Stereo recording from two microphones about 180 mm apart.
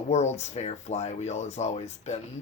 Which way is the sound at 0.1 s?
40° left (ahead or behind).